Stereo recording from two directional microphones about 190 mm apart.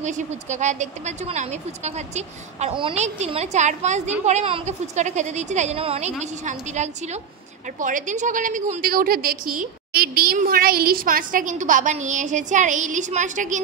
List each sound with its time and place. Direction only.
0.0 s a woman's voice: 40° right (ahead or behind)